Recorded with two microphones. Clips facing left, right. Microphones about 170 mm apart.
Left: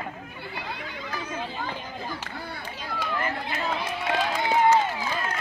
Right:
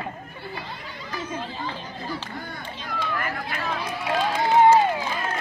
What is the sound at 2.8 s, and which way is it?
Run, 25° left (ahead or behind).